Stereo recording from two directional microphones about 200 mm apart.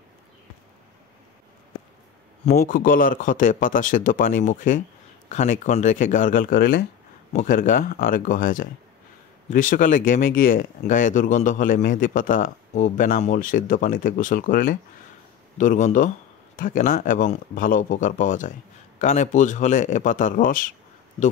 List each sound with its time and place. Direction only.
2.6 s speech: 45° left (ahead or behind)